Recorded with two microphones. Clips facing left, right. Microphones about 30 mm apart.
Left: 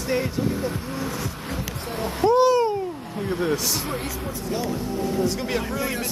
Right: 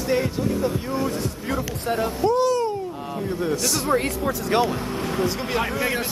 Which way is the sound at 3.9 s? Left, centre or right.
Right.